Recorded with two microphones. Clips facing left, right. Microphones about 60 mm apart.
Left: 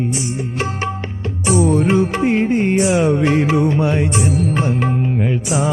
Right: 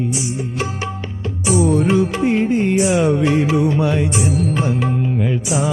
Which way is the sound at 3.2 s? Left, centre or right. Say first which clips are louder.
Left 1 dB; left.